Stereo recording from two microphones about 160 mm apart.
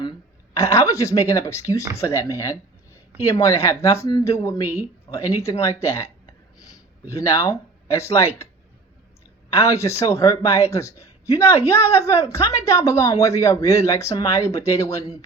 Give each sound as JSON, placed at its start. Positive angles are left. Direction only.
{"t": 0.5, "sound": "speech", "side_deg": 15}
{"t": 7.1, "sound": "speech", "side_deg": 20}
{"t": 9.5, "sound": "a woman's voice", "side_deg": 15}